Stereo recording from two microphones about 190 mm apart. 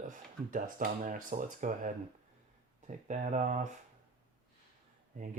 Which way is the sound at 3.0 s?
40° right (ahead or behind).